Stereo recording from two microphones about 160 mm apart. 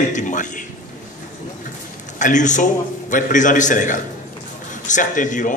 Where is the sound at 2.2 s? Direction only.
50° left (ahead or behind).